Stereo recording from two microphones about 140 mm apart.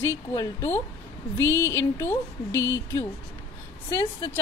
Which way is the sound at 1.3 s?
15° left (ahead or behind).